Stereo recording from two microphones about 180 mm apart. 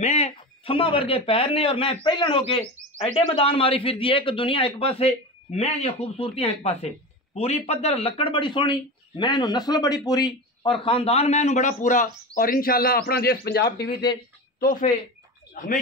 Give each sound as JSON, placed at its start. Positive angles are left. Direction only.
{"t": 0.0, "sound": "a man's voice", "side_deg": 35}
{"t": 14.6, "sound": "speech", "side_deg": 50}